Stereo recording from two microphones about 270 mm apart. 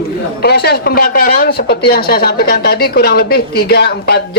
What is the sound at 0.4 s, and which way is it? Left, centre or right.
Speech, left.